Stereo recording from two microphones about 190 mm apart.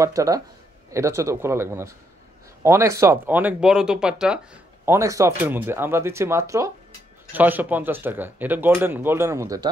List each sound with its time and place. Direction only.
0.0 s speech: 15° right (ahead or behind)
4.8 s speech: 15° right (ahead or behind)